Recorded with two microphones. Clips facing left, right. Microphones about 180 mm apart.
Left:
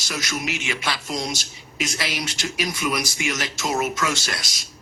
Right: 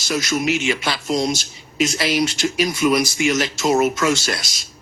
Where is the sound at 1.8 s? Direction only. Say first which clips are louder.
Right 9 dB; 30° right (ahead or behind).